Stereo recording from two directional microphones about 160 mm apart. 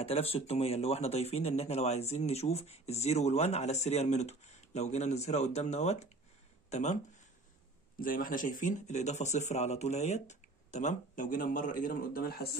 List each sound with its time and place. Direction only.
0.0 s speech: 35° left (ahead or behind)
8.0 s speech: 60° left (ahead or behind)